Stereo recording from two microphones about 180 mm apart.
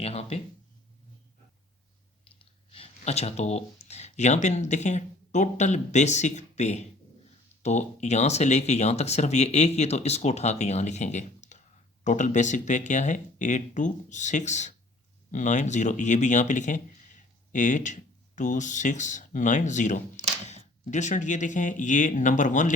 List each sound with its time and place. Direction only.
0.0 s speech: 35° left (ahead or behind)
2.4 s speech: 30° left (ahead or behind)